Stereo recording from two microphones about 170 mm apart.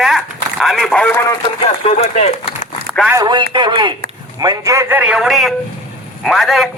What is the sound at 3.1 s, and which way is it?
A man's voice, 20° right (ahead or behind).